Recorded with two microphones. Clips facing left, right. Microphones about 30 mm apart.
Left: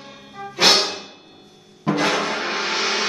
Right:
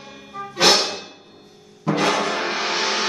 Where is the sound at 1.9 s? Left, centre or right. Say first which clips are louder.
Right 1 dB; centre.